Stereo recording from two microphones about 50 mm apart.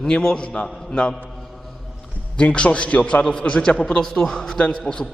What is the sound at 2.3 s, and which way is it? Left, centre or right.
A man's voice, left.